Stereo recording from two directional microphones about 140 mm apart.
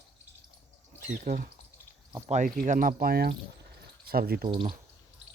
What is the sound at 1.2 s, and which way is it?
Speech, 65° right (ahead or behind).